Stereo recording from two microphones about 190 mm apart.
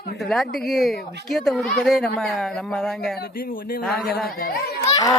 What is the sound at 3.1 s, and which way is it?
A woman's voice, 50° left (ahead or behind).